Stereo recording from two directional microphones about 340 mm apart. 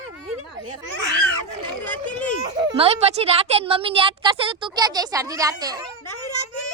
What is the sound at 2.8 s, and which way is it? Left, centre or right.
A woman's voice, centre.